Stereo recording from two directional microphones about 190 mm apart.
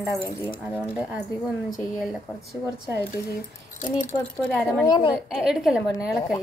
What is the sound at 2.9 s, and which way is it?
Speech, 55° left (ahead or behind).